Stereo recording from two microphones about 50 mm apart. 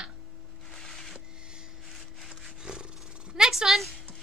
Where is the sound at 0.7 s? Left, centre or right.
Centre.